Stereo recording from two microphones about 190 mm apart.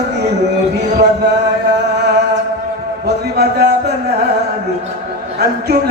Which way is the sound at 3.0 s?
55° right (ahead or behind).